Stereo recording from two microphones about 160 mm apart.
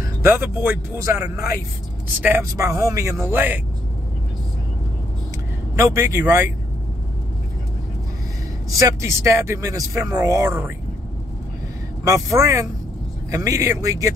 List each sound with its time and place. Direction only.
0.0 s a man's voice: 15° right (ahead or behind)
5.8 s a man's voice: 15° right (ahead or behind)
8.6 s speech: 20° right (ahead or behind)
12.0 s speech: 20° right (ahead or behind)